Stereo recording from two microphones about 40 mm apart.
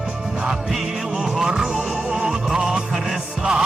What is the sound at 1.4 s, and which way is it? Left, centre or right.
Music, centre.